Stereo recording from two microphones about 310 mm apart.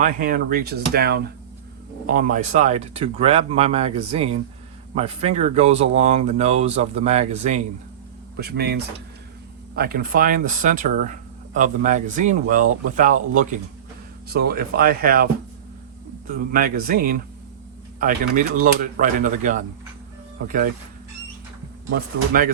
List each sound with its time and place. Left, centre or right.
0.0 s speech: right
21.8 s speech: right